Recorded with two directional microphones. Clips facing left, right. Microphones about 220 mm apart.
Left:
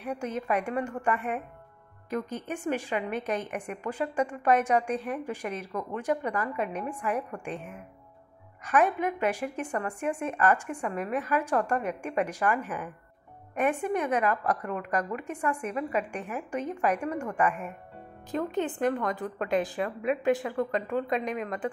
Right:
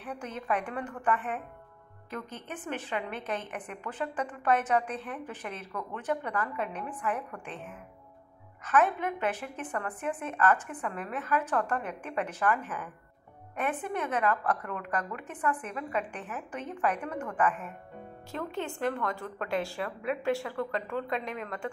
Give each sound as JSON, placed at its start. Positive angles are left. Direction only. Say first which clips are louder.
{"t": 0.0, "sound": "a woman's voice", "louder": "left 6 dB", "side_deg": 10}